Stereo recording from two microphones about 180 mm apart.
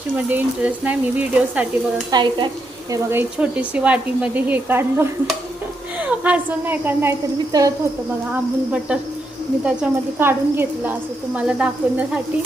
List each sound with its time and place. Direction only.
0.2 s speech: 10° right (ahead or behind)
2.0 s speech: 25° right (ahead or behind)
2.9 s speech: 10° right (ahead or behind)
6.1 s speech: 10° right (ahead or behind)
9.6 s speech: 10° right (ahead or behind)